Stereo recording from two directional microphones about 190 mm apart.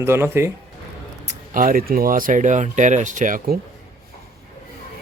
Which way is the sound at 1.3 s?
45° right (ahead or behind).